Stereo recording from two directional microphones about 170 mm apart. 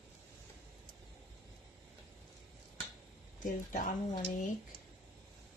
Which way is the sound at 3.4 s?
50° left (ahead or behind).